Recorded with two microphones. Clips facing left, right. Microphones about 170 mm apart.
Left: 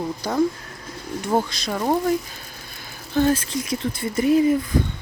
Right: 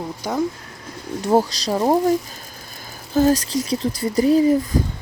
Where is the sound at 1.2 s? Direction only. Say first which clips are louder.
Right 5 dB; 40° right (ahead or behind).